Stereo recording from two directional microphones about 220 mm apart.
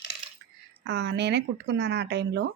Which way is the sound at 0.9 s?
50° right (ahead or behind).